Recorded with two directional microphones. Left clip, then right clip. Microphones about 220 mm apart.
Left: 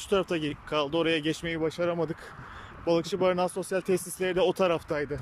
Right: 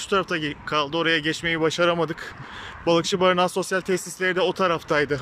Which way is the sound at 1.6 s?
Centre (ahead or behind).